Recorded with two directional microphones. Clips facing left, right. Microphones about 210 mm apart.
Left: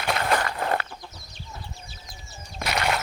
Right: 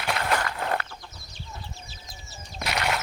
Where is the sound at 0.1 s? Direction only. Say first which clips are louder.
Left 2 dB; 35° left (ahead or behind).